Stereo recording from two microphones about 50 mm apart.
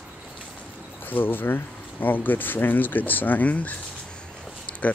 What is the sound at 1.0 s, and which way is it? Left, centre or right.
Speech, left.